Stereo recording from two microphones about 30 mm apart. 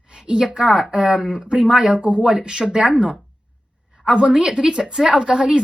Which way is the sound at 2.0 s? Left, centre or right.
Right.